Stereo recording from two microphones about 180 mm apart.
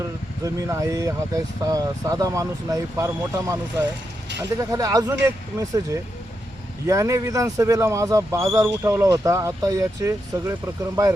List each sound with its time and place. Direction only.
0.4 s speech: 15° right (ahead or behind)